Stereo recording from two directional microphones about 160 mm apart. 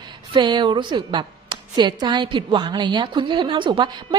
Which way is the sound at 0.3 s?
30° right (ahead or behind).